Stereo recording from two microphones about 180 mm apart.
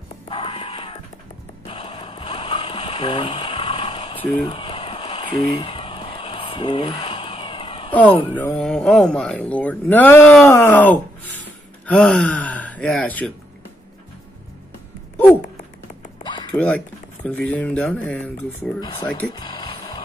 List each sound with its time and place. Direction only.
0.3 s music: 30° left (ahead or behind)
1.7 s a sound: 30° left (ahead or behind)
7.9 s speech: 10° left (ahead or behind)
11.3 s a sound: 10° left (ahead or behind)
16.5 s speech: 10° left (ahead or behind)
18.8 s speech: 20° left (ahead or behind)
19.3 s music: 25° left (ahead or behind)